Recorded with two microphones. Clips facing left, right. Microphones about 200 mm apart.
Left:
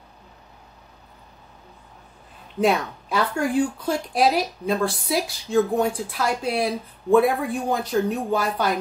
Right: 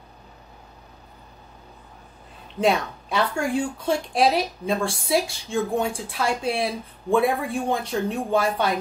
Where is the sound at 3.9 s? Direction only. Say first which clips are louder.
Right 2 dB; centre (ahead or behind).